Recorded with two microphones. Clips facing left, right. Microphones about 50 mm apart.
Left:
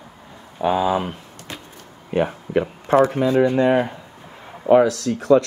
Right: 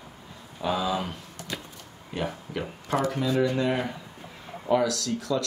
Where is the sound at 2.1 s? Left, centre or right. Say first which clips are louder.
Left 11 dB; left.